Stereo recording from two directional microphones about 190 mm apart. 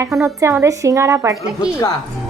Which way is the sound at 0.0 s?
15° right (ahead or behind).